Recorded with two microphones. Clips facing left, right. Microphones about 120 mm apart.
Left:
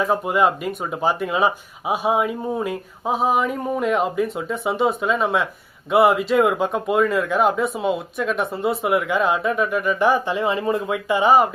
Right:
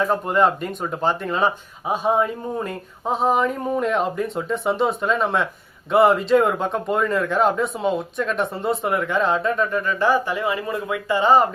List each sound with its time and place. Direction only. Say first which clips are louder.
0.1 s speech: even; 5° left (ahead or behind)